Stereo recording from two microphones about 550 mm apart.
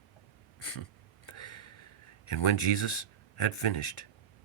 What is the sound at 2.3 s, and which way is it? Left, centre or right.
Speech, left.